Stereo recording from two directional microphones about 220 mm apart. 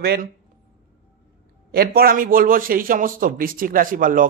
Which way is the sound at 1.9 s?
40° right (ahead or behind).